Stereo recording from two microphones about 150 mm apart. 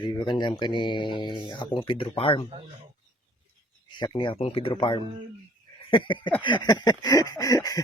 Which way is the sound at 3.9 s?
30° left (ahead or behind).